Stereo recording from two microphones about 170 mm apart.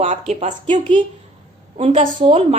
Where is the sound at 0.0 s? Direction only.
40° right (ahead or behind).